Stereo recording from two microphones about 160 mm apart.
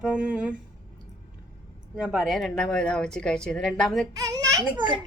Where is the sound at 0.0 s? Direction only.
5° right (ahead or behind).